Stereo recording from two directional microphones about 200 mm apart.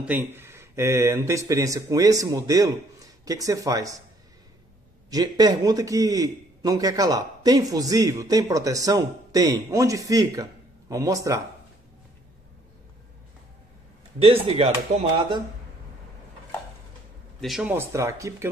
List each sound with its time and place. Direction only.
0.0 s a man's voice: 10° right (ahead or behind)
5.1 s a man's voice: 20° right (ahead or behind)
14.2 s speech: 30° right (ahead or behind)
17.4 s a man's voice: centre (ahead or behind)